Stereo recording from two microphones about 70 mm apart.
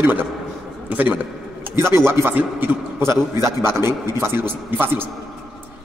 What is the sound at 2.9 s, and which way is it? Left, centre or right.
A man's voice, right.